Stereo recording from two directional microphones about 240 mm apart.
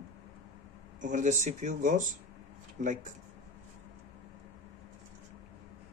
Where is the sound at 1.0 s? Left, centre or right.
Right.